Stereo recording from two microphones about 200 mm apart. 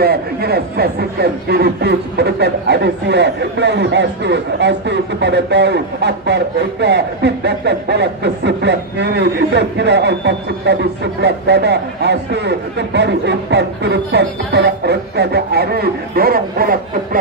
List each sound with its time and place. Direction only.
0.0 s speech: 50° right (ahead or behind)